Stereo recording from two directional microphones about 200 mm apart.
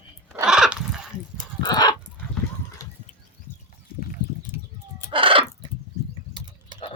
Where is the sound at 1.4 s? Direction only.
20° left (ahead or behind).